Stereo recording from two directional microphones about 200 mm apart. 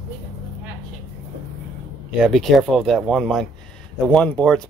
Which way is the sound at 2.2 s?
Centre (ahead or behind).